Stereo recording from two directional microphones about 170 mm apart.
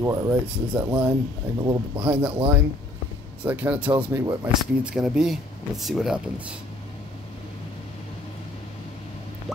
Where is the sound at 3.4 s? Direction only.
10° right (ahead or behind).